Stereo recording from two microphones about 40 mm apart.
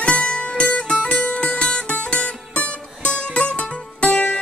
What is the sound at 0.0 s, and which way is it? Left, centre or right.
Music, left.